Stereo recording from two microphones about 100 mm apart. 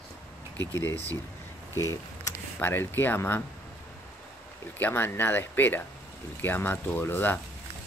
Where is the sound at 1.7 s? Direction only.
35° left (ahead or behind).